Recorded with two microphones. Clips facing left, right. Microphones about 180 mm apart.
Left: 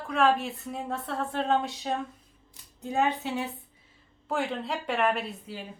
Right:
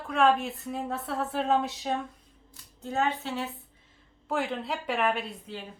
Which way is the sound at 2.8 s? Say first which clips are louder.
Left 2 dB; 15° left (ahead or behind).